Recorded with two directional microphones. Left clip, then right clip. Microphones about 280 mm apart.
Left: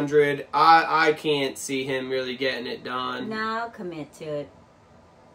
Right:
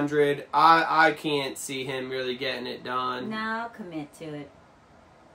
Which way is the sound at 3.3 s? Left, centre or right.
Centre.